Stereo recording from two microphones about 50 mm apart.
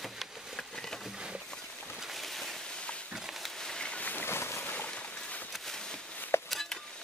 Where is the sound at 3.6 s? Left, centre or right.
Centre.